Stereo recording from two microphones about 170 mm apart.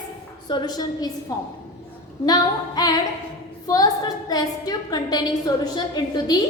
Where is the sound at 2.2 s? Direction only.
25° left (ahead or behind).